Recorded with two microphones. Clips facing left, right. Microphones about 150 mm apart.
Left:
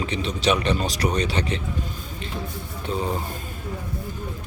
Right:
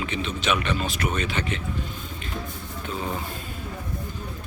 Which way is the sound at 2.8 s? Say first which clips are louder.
Left 5 dB; 30° left (ahead or behind).